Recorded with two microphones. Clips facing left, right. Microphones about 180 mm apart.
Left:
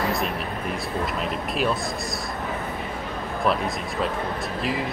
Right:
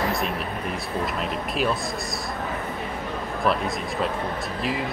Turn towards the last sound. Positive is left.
turn(degrees=0)  # may be behind; listen again after turning